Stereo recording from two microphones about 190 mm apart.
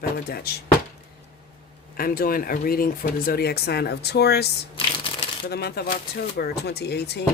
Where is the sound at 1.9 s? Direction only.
50° left (ahead or behind).